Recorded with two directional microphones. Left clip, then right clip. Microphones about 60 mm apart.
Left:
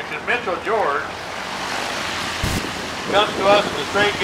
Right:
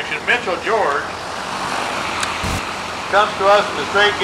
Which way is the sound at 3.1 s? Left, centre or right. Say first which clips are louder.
Right 2 dB; left.